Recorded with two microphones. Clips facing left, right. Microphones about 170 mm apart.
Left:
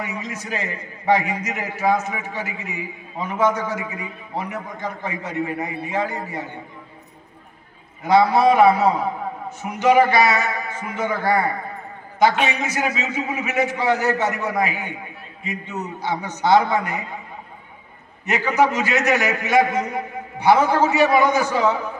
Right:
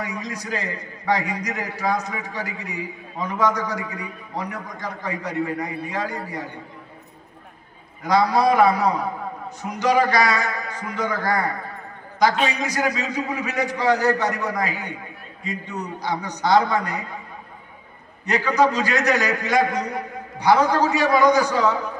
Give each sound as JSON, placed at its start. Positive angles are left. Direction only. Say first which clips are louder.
{"t": 0.0, "sound": "a man's voice", "louder": "even", "side_deg": 20}
{"t": 8.1, "sound": "a man's voice", "louder": "left 3 dB", "side_deg": 20}
{"t": 12.7, "sound": "a man's voice", "louder": "even", "side_deg": 20}
{"t": 18.3, "sound": "a man's voice", "louder": "even", "side_deg": 20}